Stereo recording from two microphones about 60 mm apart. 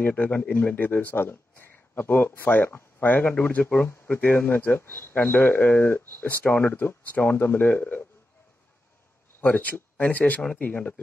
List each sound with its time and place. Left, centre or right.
0.0 s speech: left
9.4 s speech: left